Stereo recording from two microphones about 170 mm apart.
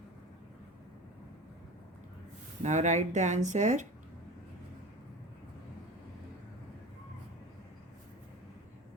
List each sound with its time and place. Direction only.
2.6 s speech: 45° right (ahead or behind)